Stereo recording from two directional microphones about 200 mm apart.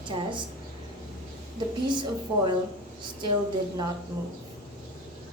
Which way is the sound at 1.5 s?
25° right (ahead or behind).